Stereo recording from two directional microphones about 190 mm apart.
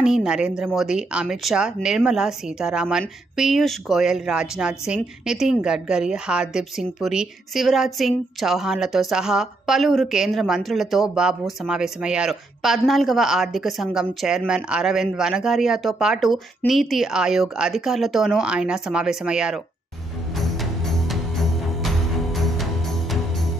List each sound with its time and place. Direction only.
0.0 s speech: 5° right (ahead or behind)
20.3 s music: centre (ahead or behind)